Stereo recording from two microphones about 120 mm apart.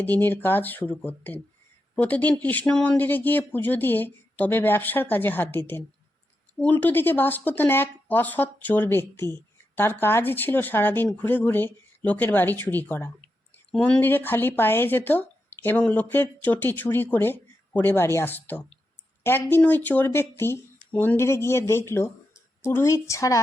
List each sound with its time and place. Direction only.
0.0 s speech: 15° left (ahead or behind)